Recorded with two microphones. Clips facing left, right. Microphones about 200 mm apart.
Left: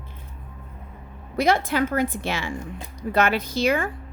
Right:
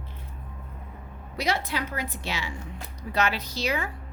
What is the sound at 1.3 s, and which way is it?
A woman's voice, 50° left (ahead or behind).